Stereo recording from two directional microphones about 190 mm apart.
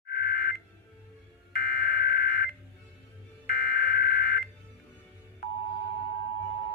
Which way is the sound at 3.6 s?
50° left (ahead or behind).